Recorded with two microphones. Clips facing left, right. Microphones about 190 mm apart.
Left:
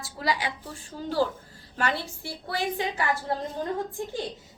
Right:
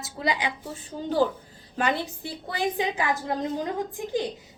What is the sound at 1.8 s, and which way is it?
A woman's voice, 20° right (ahead or behind).